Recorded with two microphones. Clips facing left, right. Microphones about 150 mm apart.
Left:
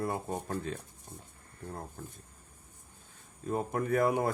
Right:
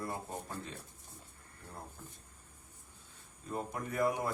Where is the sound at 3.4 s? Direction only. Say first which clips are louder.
Left 8 dB; 55° left (ahead or behind).